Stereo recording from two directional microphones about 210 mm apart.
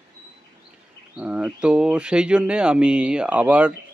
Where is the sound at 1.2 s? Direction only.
5° right (ahead or behind).